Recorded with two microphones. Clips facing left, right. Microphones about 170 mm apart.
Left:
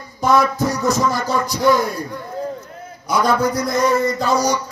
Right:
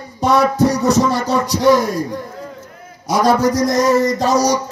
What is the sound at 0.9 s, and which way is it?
Music, 75° right (ahead or behind).